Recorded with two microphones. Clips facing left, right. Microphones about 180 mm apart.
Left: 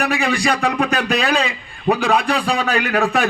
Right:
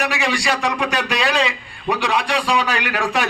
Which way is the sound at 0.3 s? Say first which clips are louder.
Left 3 dB; 80° right.